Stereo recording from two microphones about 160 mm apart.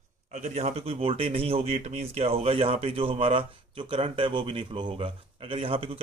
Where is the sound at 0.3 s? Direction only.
45° right (ahead or behind).